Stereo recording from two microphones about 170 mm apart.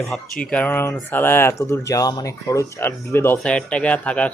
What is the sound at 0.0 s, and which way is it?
Speech, centre (ahead or behind).